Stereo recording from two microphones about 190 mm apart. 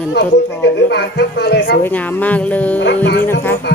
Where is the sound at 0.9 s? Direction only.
65° left (ahead or behind).